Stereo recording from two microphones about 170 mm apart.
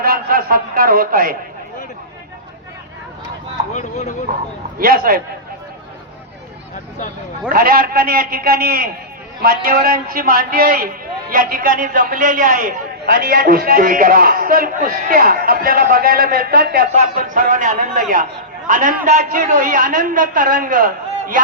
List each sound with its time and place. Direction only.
0.0 s a sound: 60° right (ahead or behind)
3.7 s speech: 45° left (ahead or behind)
4.8 s a man's voice: 60° right (ahead or behind)
7.5 s a man's voice: 60° right (ahead or behind)
16.9 s a man's voice: 50° right (ahead or behind)